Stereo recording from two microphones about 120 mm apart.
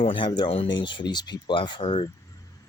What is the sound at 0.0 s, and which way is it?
Speech, 45° left (ahead or behind).